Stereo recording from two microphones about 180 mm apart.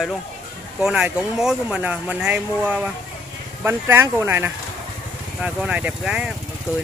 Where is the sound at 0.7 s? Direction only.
5° right (ahead or behind).